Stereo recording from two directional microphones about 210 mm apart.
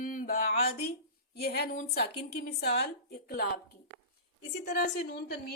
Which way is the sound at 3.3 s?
50° left (ahead or behind).